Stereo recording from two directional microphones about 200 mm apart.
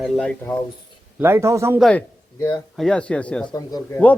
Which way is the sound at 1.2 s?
10° right (ahead or behind).